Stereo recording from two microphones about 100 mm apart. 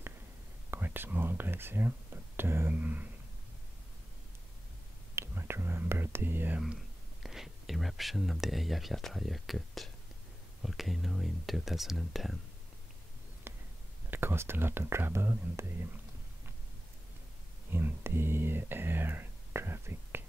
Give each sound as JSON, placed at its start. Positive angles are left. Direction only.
{"t": 0.7, "sound": "speech", "side_deg": -20}
{"t": 5.1, "sound": "speech", "side_deg": -25}
{"t": 7.2, "sound": "speech", "side_deg": -5}
{"t": 13.5, "sound": "a sound", "side_deg": -20}
{"t": 14.1, "sound": "speech", "side_deg": -25}
{"t": 17.6, "sound": "speech", "side_deg": -20}